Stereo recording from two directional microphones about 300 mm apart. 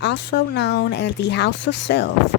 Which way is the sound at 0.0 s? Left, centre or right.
Left.